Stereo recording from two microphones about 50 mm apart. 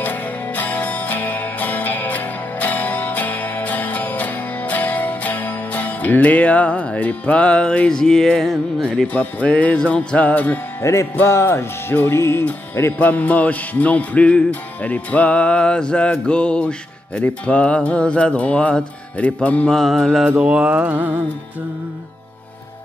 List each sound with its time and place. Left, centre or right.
0.0 s music: left
7.9 s speech: centre
9.0 s music: left
10.8 s music: left
11.9 s music: left
13.0 s music: left
19.7 s mantra: centre
20.3 s mantra: right